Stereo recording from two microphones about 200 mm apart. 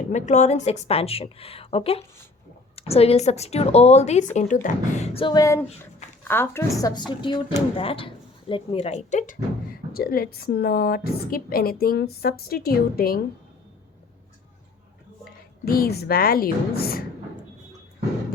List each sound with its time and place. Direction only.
0.1 s a woman's voice: 35° left (ahead or behind)
15.2 s a woman's voice: 50° left (ahead or behind)